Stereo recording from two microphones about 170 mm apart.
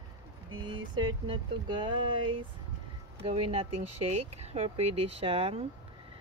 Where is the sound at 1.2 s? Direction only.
25° right (ahead or behind).